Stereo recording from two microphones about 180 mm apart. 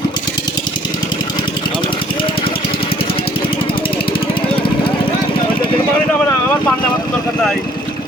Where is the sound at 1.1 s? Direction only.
25° left (ahead or behind).